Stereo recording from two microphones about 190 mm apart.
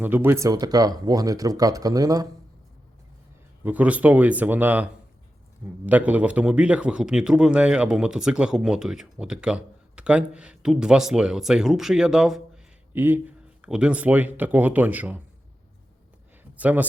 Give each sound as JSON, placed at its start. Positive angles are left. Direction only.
{"t": 0.0, "sound": "speech", "side_deg": -10}
{"t": 3.6, "sound": "a man's voice", "side_deg": -10}
{"t": 16.4, "sound": "a sound", "side_deg": -10}